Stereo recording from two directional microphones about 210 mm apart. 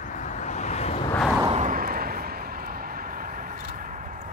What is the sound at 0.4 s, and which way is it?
Vehicle, 35° left (ahead or behind).